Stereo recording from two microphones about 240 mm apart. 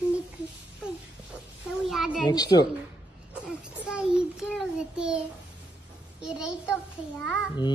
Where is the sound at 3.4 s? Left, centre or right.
Centre.